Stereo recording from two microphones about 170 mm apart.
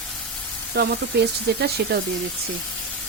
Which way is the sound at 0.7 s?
75° right (ahead or behind).